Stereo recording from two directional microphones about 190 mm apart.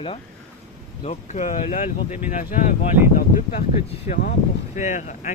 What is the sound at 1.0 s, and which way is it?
Speech, 35° left (ahead or behind).